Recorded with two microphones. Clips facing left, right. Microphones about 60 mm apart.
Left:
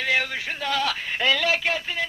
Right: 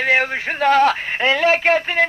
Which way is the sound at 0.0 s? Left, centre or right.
Right.